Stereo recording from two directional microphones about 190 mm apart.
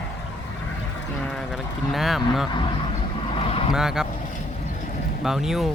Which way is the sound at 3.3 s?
30° left (ahead or behind).